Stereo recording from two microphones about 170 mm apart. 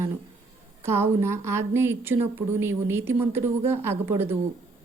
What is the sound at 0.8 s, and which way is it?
A woman's voice, 15° right (ahead or behind).